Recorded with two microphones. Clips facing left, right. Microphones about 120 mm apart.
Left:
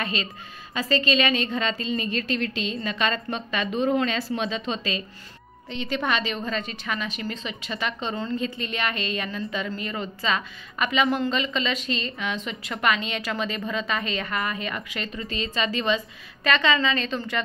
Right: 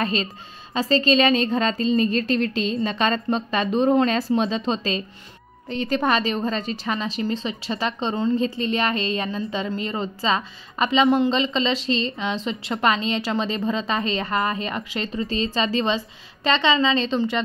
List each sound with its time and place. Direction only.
0.0 s a woman's voice: 35° right (ahead or behind)